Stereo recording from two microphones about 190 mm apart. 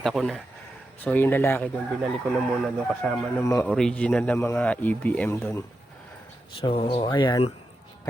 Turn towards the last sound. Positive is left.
turn(degrees=20)  # may be behind; listen again after turning